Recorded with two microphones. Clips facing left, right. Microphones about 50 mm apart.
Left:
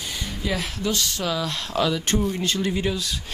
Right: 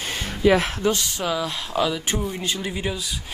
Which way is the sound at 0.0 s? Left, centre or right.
Right.